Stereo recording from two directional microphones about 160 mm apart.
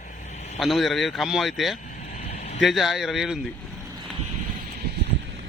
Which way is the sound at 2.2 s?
40° left (ahead or behind).